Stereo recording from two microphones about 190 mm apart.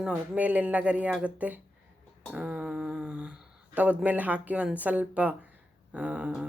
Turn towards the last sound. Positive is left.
turn(degrees=-5)  # may be behind; listen again after turning